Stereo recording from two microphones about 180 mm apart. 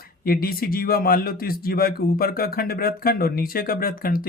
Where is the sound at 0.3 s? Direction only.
55° left (ahead or behind).